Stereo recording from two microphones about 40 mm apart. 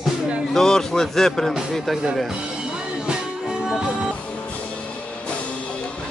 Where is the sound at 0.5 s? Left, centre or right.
Centre.